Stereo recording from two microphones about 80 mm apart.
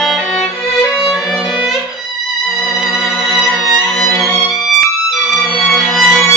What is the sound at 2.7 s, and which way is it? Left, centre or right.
Music, centre.